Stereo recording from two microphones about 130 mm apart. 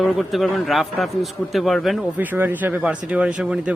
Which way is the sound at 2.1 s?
15° right (ahead or behind).